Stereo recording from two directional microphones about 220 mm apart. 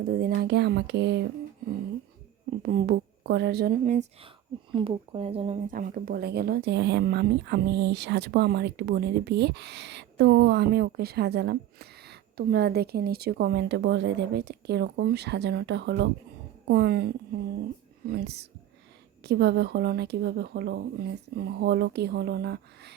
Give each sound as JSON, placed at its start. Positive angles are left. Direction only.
{"t": 0.0, "sound": "speech", "side_deg": -40}
{"t": 2.6, "sound": "speech", "side_deg": -40}
{"t": 5.7, "sound": "speech", "side_deg": -40}